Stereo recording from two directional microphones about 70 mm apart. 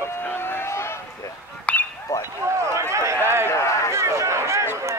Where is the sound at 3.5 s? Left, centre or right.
Left.